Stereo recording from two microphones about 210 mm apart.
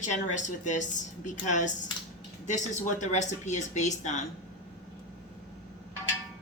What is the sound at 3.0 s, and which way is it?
Speech, 35° left (ahead or behind).